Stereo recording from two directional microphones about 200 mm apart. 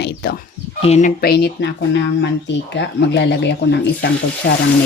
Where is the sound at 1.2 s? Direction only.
55° left (ahead or behind).